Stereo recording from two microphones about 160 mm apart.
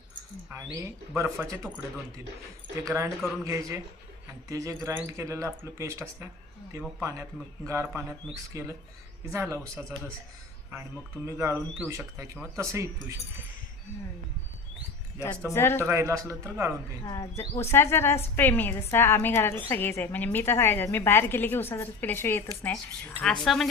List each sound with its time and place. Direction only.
0.5 s speech: 20° right (ahead or behind)
2.8 s speech: 15° right (ahead or behind)
11.3 s speech: 15° right (ahead or behind)
15.4 s a woman's voice: 15° left (ahead or behind)
15.8 s speech: 15° right (ahead or behind)
17.1 s a woman's voice: 20° left (ahead or behind)
23.2 s speech: 5° left (ahead or behind)